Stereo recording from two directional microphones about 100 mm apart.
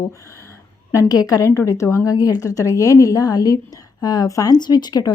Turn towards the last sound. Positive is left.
turn(degrees=40)  # may be behind; listen again after turning